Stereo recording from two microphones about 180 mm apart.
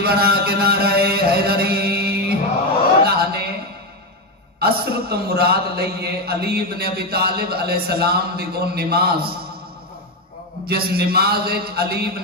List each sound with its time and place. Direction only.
0.0 s a man's voice: 60° right (ahead or behind)
3.1 s a sound: 60° right (ahead or behind)
4.6 s a man's voice: 60° right (ahead or behind)
10.7 s a man's voice: 60° right (ahead or behind)